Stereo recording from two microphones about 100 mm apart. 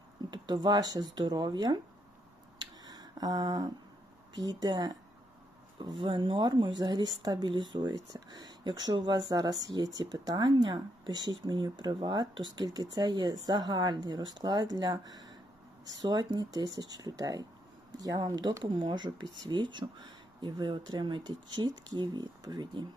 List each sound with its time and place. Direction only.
0.3 s speech: 45° right (ahead or behind)
2.6 s a sound: 40° right (ahead or behind)
4.4 s speech: 40° right (ahead or behind)
6.0 s speech: 55° right (ahead or behind)